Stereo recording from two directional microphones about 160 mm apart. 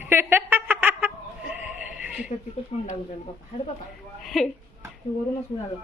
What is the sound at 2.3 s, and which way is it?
Speech, 45° left (ahead or behind).